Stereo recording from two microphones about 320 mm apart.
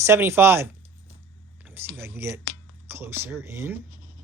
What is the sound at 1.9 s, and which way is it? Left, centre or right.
Speech, centre.